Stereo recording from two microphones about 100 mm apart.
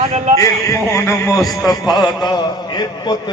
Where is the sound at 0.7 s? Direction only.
30° left (ahead or behind).